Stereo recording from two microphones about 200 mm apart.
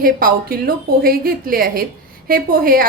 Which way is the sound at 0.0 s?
45° right (ahead or behind).